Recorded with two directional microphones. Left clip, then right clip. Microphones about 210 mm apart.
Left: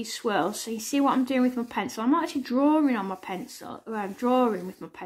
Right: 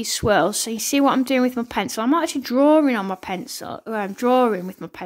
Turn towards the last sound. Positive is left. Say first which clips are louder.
# right 6 dB
turn(degrees=-40)  # may be behind; listen again after turning